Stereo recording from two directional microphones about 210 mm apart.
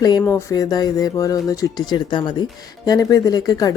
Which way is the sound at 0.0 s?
15° left (ahead or behind).